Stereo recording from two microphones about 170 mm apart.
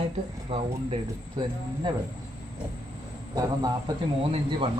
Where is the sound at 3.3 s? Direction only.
25° right (ahead or behind).